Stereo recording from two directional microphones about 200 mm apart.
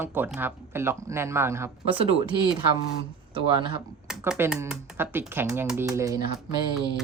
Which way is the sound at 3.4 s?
25° right (ahead or behind).